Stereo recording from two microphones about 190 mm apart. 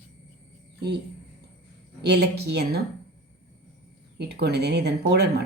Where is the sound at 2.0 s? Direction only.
60° right (ahead or behind).